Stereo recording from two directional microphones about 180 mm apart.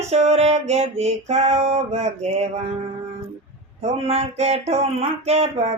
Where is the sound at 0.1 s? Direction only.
35° right (ahead or behind).